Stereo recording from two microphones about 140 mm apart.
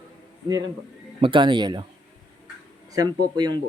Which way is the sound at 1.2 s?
35° right (ahead or behind).